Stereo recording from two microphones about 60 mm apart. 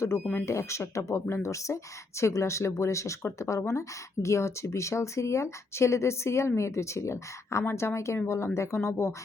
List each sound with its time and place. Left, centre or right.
0.4 s speech: left
7.6 s speech: left